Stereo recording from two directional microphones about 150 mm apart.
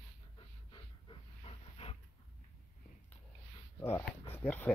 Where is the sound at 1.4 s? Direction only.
40° left (ahead or behind).